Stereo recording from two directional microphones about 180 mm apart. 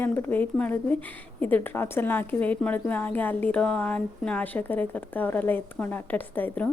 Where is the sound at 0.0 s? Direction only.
10° left (ahead or behind).